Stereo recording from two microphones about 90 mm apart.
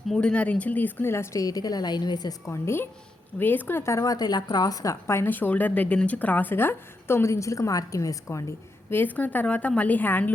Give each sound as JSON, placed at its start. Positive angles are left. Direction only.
{"t": 0.1, "sound": "a woman's voice", "side_deg": 10}
{"t": 2.5, "sound": "a woman's voice", "side_deg": 25}
{"t": 8.9, "sound": "a woman's voice", "side_deg": 20}